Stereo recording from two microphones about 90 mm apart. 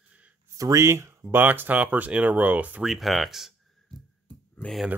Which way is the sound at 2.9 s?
Centre (ahead or behind).